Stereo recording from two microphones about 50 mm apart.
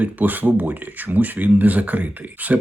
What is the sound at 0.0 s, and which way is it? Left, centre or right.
Speech, right.